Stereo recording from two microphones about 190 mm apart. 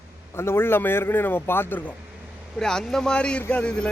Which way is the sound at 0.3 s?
10° left (ahead or behind).